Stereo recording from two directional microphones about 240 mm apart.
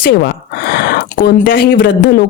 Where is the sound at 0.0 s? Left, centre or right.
Left.